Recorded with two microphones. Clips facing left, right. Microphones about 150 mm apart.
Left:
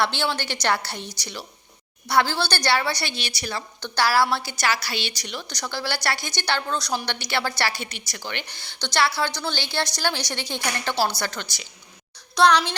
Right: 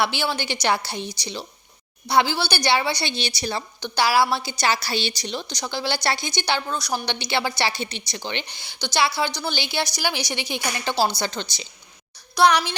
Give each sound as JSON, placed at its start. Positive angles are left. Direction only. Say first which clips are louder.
{"t": 0.0, "sound": "a woman's voice", "louder": "right 1 dB", "side_deg": -10}
{"t": 3.8, "sound": "a woman's voice", "louder": "right 1 dB", "side_deg": -15}
{"t": 5.5, "sound": "a woman's voice", "louder": "right 1 dB", "side_deg": -15}
{"t": 12.3, "sound": "a woman's voice", "louder": "even", "side_deg": -5}